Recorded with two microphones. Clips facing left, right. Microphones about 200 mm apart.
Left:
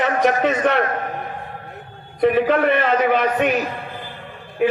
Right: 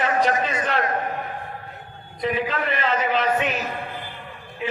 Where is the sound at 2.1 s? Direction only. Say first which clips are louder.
Left 9 dB; 60° left (ahead or behind).